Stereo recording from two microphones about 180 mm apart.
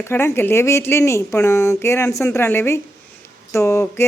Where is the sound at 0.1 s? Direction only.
15° left (ahead or behind).